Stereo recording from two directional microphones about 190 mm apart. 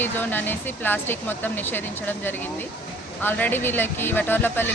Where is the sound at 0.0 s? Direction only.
10° left (ahead or behind).